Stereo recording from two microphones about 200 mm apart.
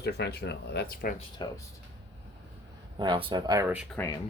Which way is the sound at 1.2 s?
20° left (ahead or behind).